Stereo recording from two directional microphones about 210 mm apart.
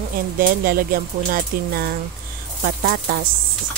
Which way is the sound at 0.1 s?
40° right (ahead or behind).